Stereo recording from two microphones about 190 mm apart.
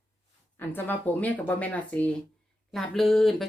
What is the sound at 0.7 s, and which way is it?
Speech, 10° left (ahead or behind).